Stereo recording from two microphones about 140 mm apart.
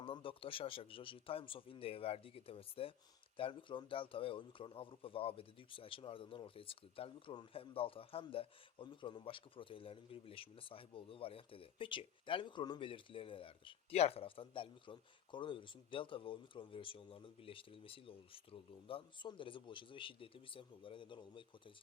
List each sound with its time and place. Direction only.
0.0 s a man's voice: 40° left (ahead or behind)